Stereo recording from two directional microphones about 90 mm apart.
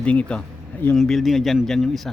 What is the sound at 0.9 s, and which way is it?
Speech, centre (ahead or behind).